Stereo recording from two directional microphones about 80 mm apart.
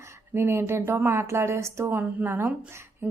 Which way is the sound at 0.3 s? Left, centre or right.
Right.